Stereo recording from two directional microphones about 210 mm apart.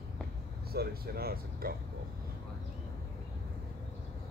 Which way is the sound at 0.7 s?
50° right (ahead or behind).